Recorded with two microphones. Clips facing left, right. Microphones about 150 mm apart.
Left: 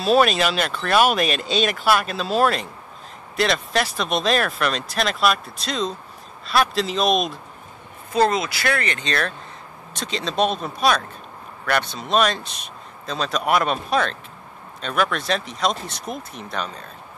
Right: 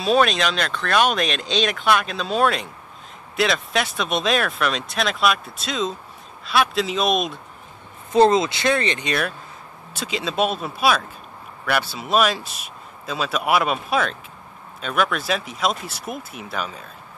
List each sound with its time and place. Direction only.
0.0 s speech: 5° left (ahead or behind)
8.1 s speech: 25° right (ahead or behind); by 16.8 s 5° right (ahead or behind)